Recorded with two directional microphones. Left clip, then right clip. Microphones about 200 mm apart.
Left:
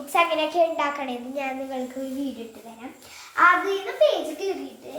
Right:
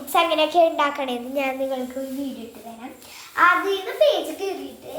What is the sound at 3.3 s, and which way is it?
Speech, 15° right (ahead or behind).